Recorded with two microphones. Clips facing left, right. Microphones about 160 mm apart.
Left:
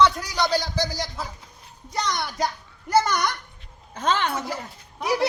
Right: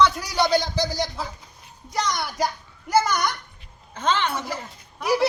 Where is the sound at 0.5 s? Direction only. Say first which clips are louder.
Right 3 dB; 20° right (ahead or behind).